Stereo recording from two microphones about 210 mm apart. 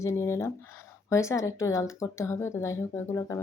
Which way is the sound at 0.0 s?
15° left (ahead or behind).